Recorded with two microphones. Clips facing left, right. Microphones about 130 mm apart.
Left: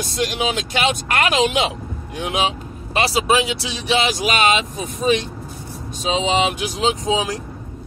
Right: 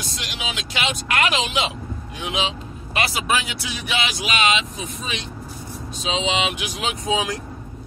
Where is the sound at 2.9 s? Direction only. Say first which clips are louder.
Left 5 dB; 30° left (ahead or behind).